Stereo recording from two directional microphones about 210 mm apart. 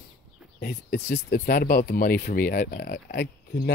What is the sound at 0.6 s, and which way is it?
Speech, 50° left (ahead or behind).